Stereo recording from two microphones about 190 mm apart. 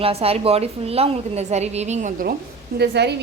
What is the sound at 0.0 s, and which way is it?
A woman's voice, 30° right (ahead or behind).